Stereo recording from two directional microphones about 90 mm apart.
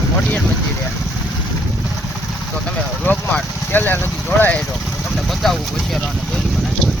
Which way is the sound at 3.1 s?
20° left (ahead or behind).